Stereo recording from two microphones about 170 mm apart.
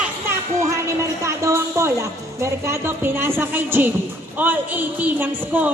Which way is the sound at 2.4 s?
15° right (ahead or behind).